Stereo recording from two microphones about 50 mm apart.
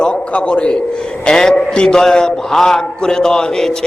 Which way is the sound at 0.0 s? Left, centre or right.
Centre.